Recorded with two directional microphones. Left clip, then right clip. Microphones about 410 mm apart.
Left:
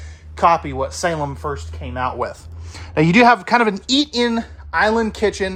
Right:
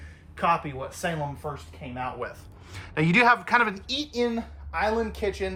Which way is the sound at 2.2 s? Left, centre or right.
Centre.